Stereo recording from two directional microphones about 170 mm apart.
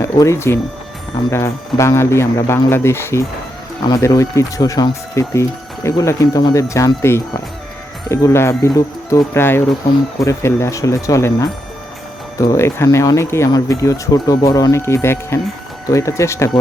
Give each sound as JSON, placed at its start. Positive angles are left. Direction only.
{"t": 0.0, "sound": "speech", "side_deg": 15}